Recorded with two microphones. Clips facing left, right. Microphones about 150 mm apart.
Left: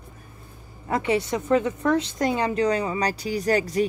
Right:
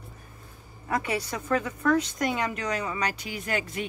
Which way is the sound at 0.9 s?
25° left (ahead or behind).